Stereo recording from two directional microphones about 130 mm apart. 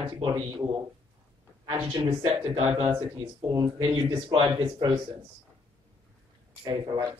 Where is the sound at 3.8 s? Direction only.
40° right (ahead or behind).